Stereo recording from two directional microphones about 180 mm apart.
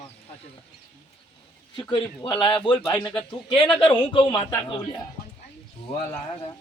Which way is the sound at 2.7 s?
15° left (ahead or behind).